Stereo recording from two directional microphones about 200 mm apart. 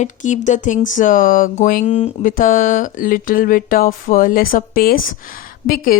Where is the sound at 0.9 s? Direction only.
40° left (ahead or behind).